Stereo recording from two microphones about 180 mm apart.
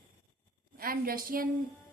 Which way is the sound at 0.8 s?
55° right (ahead or behind).